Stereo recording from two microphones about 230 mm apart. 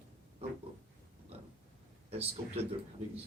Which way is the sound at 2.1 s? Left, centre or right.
Right.